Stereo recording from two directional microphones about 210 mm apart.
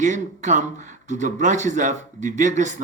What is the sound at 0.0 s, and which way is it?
Speech, 35° right (ahead or behind).